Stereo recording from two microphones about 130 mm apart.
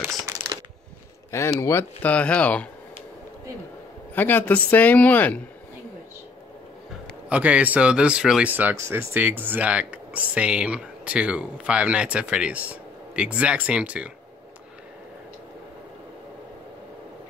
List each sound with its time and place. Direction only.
0.2 s crumpling: 30° right (ahead or behind)
1.3 s speech: 20° left (ahead or behind)
4.1 s speech: 15° left (ahead or behind)
7.2 s speech: 10° right (ahead or behind)